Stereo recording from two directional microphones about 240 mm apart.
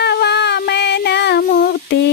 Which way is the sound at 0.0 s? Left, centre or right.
Left.